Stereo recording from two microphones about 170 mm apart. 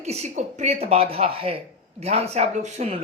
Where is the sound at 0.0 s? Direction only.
40° right (ahead or behind).